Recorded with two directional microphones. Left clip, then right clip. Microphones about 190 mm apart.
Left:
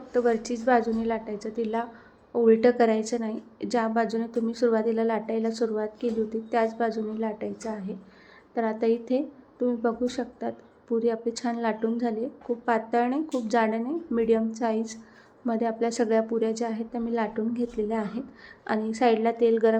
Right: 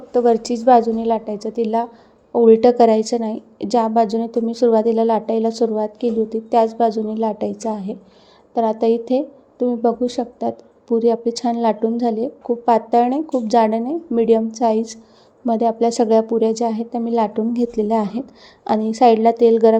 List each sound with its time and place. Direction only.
0.1 s a woman's voice: 30° right (ahead or behind)